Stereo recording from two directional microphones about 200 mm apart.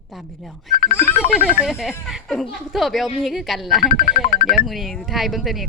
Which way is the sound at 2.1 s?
Centre (ahead or behind).